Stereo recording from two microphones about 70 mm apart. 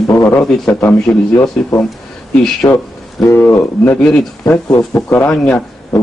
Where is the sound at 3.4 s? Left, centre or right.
Left.